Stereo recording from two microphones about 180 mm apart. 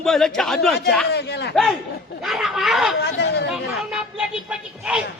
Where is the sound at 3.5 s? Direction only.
5° right (ahead or behind).